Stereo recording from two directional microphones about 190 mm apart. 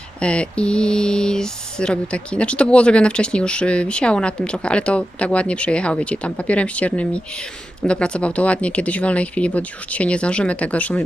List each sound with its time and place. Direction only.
0.2 s mantra: 5° left (ahead or behind)
7.9 s speech: 5° left (ahead or behind)